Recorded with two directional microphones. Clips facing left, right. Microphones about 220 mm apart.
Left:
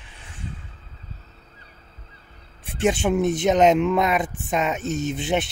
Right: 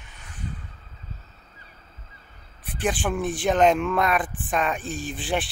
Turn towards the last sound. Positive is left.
turn(degrees=20)  # may be behind; listen again after turning